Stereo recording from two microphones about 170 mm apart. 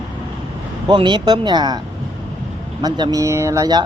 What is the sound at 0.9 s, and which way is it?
Speech, 25° right (ahead or behind).